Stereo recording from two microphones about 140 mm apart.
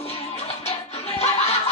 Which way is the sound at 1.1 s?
50° left (ahead or behind).